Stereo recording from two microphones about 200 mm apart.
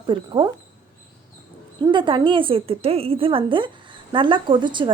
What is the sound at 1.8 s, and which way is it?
Speech, 25° right (ahead or behind).